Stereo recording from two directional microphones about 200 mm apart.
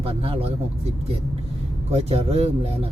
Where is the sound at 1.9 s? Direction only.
30° right (ahead or behind).